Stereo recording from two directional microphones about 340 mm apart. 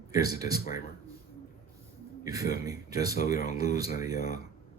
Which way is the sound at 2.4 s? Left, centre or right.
Left.